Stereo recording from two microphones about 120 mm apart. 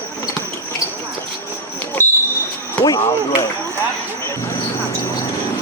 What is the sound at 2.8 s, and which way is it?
Speech, 30° left (ahead or behind).